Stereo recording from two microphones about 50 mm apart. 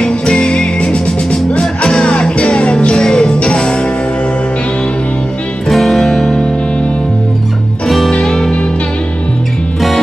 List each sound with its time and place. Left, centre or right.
0.0 s music: centre
5.7 s music: centre
8.1 s music: centre